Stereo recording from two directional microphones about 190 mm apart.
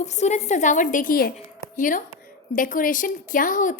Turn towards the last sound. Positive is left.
turn(degrees=45)  # may be behind; listen again after turning